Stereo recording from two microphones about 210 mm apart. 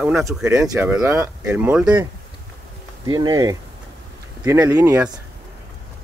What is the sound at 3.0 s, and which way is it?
Speech, 20° right (ahead or behind).